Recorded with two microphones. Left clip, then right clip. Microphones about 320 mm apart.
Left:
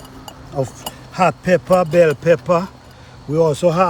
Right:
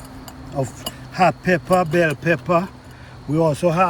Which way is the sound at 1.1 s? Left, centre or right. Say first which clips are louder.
Left 2 dB; centre.